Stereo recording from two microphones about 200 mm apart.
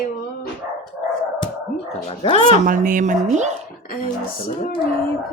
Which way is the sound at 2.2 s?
30° left (ahead or behind).